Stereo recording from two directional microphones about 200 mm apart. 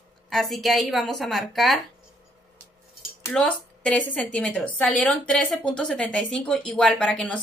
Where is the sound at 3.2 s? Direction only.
5° left (ahead or behind).